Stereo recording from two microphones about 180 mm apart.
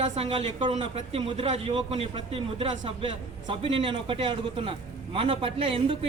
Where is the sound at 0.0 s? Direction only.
35° right (ahead or behind).